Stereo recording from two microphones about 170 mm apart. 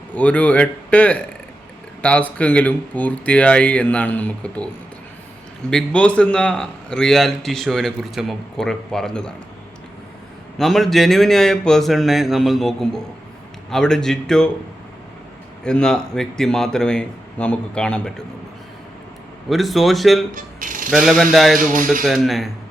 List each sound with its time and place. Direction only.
0.1 s speech: 10° left (ahead or behind)
5.7 s a man's voice: 5° left (ahead or behind)
10.6 s a man's voice: centre (ahead or behind)
15.6 s a man's voice: 5° left (ahead or behind)
19.5 s a man's voice: centre (ahead or behind)
20.3 s music: 50° right (ahead or behind)
20.9 s a man's voice: centre (ahead or behind)